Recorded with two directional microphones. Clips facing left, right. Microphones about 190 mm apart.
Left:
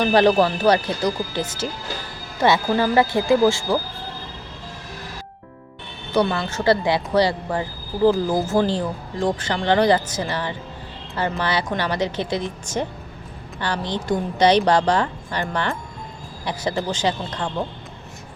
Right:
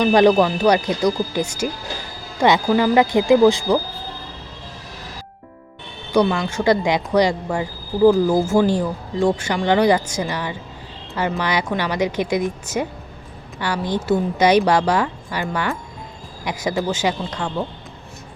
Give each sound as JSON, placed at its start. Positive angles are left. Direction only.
{"t": 0.0, "sound": "speech", "side_deg": -15}
{"t": 6.1, "sound": "speech", "side_deg": -15}